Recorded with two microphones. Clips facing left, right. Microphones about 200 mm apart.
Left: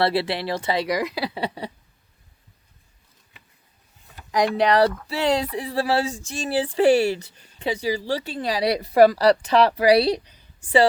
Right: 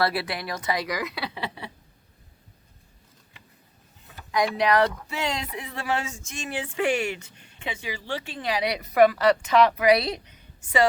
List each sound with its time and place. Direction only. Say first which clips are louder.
0.0 s speech: left 4 dB; 30° left (ahead or behind)
4.5 s speech: left 4 dB; 35° left (ahead or behind)